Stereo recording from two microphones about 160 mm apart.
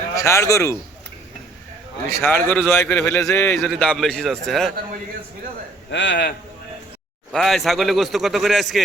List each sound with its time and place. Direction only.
0.2 s a man's voice: 20° left (ahead or behind)
2.0 s a man's voice: 15° left (ahead or behind)
5.9 s a man's voice: 90° left
7.3 s a man's voice: centre (ahead or behind)